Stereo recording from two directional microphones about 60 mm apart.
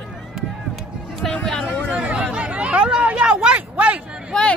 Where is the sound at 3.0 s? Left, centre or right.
Centre.